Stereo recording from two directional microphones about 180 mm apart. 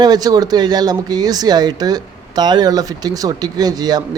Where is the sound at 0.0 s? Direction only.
20° right (ahead or behind).